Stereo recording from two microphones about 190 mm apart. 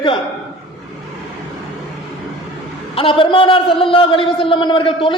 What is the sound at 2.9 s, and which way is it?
A man's voice, 25° left (ahead or behind).